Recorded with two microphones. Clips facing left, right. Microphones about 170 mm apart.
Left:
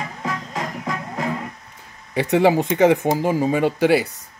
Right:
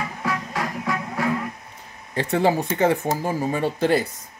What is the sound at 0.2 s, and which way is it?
Music, 20° left (ahead or behind).